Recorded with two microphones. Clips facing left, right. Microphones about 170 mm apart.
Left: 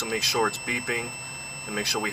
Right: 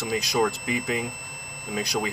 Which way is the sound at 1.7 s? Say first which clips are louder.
Right 2 dB; 15° right (ahead or behind).